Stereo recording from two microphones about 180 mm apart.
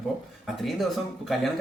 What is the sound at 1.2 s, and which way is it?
Speech, centre (ahead or behind).